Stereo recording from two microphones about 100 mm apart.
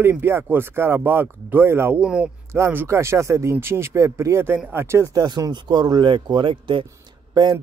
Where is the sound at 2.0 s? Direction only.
10° right (ahead or behind).